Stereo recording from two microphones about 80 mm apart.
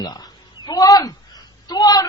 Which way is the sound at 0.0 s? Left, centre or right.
Left.